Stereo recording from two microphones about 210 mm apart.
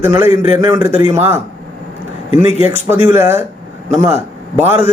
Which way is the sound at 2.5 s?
30° left (ahead or behind).